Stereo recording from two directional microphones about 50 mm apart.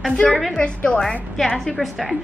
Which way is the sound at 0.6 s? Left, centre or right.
Left.